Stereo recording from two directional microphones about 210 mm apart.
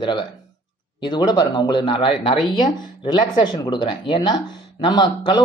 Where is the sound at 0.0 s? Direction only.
20° left (ahead or behind).